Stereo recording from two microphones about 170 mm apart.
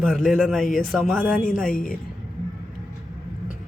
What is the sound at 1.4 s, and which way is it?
Speech, 5° left (ahead or behind).